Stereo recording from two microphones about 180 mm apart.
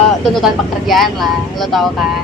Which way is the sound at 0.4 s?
Centre (ahead or behind).